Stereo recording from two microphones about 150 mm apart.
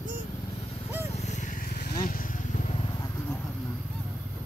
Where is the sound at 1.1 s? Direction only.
50° left (ahead or behind); by 2.0 s 90° left.